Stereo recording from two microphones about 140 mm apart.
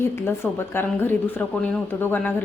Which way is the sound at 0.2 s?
15° left (ahead or behind).